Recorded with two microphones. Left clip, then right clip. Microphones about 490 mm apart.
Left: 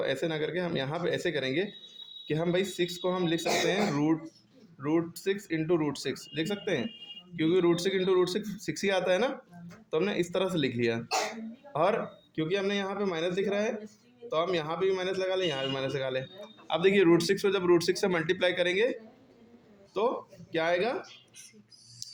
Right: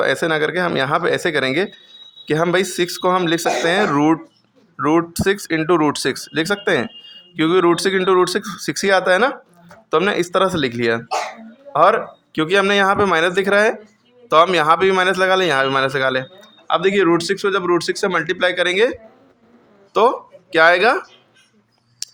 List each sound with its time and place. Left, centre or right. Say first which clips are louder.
0.0 s speech: right 13 dB; left
19.9 s speech: right 14 dB; left
22.0 s a sound: right 12 dB; left